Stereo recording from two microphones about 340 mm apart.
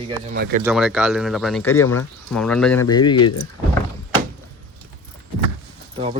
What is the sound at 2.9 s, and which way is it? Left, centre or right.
Speech, centre.